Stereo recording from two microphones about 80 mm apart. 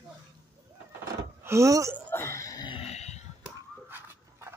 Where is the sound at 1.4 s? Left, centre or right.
Right.